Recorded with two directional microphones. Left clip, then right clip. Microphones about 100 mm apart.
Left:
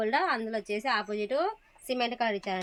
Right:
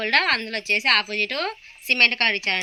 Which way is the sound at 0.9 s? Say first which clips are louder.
Right 7 dB; 55° left (ahead or behind).